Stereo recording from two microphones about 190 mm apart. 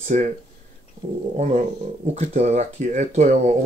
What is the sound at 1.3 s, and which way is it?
Speech, 40° right (ahead or behind).